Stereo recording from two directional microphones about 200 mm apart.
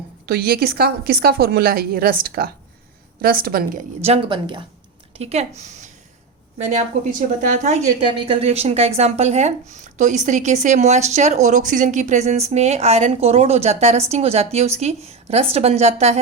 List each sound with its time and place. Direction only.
0.3 s a woman's voice: 50° right (ahead or behind)
4.0 s speech: 30° right (ahead or behind)